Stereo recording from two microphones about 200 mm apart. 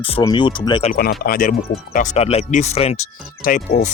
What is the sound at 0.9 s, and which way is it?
Speech, 50° left (ahead or behind).